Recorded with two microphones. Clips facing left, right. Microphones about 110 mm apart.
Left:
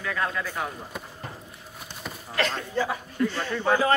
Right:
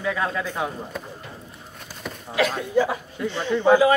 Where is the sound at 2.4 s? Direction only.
10° right (ahead or behind).